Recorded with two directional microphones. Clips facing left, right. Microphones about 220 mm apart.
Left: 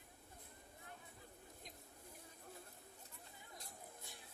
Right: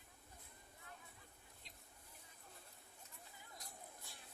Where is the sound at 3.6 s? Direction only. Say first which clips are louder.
Left 1 dB; 20° left (ahead or behind).